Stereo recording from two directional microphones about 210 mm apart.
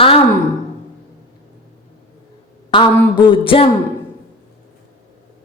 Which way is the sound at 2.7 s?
20° left (ahead or behind).